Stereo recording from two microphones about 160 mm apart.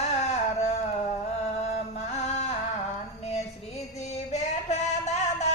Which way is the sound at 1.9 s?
45° left (ahead or behind).